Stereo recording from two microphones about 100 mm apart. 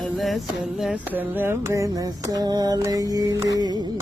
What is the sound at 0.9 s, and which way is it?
Carnatic music, 15° right (ahead or behind).